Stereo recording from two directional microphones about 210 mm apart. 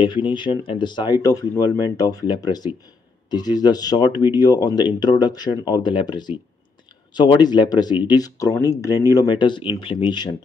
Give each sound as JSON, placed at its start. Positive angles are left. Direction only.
{"t": 0.0, "sound": "speech", "side_deg": 25}